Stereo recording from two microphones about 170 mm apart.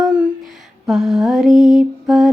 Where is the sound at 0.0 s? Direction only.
5° right (ahead or behind).